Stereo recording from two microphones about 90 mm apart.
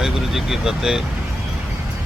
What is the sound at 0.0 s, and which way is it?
Speech, 5° right (ahead or behind).